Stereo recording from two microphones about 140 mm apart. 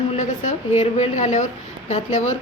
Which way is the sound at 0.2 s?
55° left (ahead or behind).